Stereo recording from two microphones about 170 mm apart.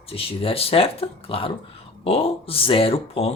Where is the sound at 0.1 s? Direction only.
35° left (ahead or behind).